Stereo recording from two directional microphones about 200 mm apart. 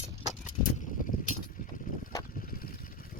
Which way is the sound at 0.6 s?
40° left (ahead or behind).